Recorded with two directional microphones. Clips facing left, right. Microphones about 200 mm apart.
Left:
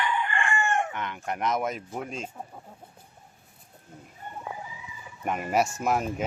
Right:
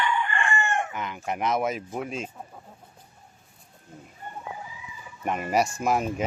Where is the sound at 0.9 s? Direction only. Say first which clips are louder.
Right 1 dB; 5° right (ahead or behind).